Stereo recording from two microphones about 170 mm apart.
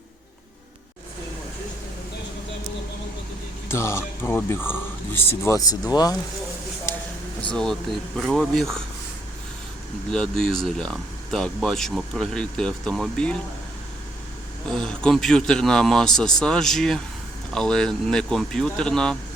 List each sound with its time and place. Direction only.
3.7 s speech: 15° left (ahead or behind)
7.5 s speech: 5° left (ahead or behind)
10.1 s speech: 5° left (ahead or behind)
14.7 s speech: 5° left (ahead or behind)